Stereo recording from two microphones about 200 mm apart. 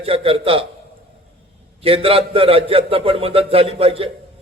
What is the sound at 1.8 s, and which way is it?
A man's voice, 30° right (ahead or behind).